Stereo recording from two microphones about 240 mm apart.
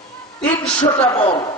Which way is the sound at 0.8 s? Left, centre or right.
Left.